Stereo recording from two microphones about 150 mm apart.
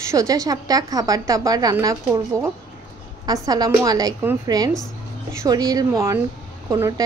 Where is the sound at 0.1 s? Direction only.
25° right (ahead or behind).